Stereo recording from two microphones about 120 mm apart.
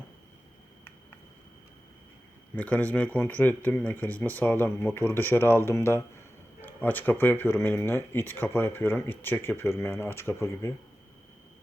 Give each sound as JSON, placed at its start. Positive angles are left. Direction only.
{"t": 2.6, "sound": "speech", "side_deg": 10}